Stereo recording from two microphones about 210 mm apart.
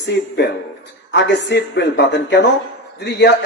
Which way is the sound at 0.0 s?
55° left (ahead or behind).